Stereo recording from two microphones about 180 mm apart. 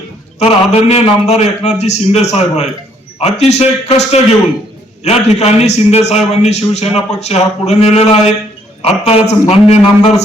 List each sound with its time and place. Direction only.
0.3 s a man's voice: 35° left (ahead or behind)